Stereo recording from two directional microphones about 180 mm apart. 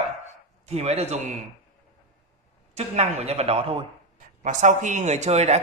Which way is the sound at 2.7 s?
40° right (ahead or behind).